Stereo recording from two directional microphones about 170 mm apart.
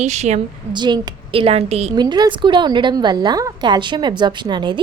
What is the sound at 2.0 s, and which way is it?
A woman's voice, 25° right (ahead or behind).